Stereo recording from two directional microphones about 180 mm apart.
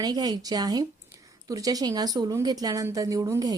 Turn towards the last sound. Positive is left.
turn(degrees=-20)  # may be behind; listen again after turning